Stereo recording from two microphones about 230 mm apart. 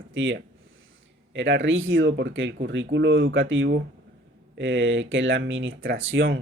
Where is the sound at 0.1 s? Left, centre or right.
Right.